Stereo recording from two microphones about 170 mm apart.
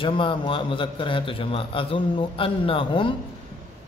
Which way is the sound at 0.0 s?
30° left (ahead or behind).